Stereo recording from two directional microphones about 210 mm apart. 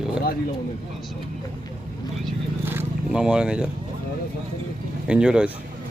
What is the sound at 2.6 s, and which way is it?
Speech, 5° right (ahead or behind).